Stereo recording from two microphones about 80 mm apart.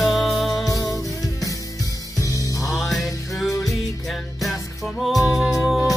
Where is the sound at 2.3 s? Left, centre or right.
Left.